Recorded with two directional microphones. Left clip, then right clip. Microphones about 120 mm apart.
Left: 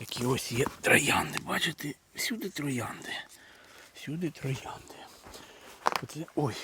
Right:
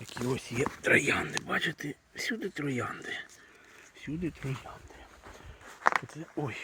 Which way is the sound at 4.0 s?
45° left (ahead or behind).